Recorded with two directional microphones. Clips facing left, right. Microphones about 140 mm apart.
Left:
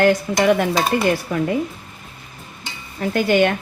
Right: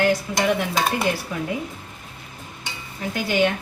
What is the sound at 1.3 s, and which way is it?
Speech, 55° left (ahead or behind).